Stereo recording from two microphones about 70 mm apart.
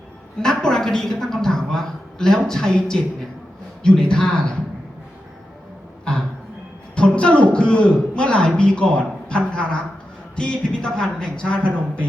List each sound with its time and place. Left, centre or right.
0.4 s a woman's voice: centre
6.9 s a sound: centre
7.5 s a man's voice: centre